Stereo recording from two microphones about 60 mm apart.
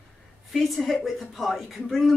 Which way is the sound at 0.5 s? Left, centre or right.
Centre.